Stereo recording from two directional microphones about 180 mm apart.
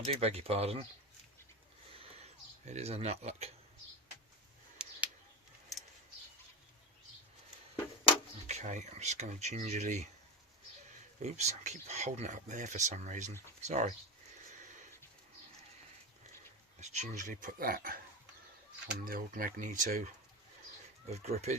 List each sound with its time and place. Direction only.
0.1 s speech: 35° right (ahead or behind)
2.6 s speech: 35° right (ahead or behind)
4.8 s a sound: 5° right (ahead or behind)
8.4 s speech: 40° right (ahead or behind)
11.2 s speech: 40° right (ahead or behind)
16.8 s speech: 40° right (ahead or behind)
21.1 s speech: 35° right (ahead or behind)